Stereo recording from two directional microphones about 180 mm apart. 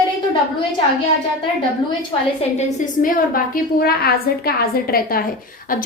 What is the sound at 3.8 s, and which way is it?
A woman's voice, 60° left (ahead or behind).